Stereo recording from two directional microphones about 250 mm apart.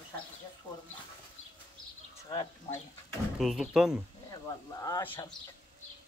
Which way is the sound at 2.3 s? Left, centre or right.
Centre.